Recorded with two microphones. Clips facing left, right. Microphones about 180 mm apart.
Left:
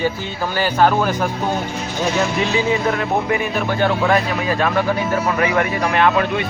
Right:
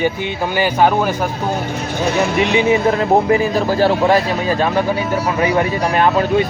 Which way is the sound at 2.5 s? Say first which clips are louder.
Right 5 dB; 25° right (ahead or behind).